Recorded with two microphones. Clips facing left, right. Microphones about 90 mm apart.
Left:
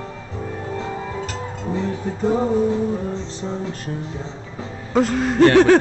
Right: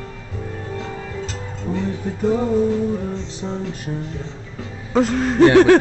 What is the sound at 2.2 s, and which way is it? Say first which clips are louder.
Music: even; 25° left (ahead or behind).